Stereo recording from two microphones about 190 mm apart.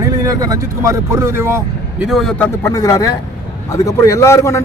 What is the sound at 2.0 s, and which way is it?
Speech, centre (ahead or behind).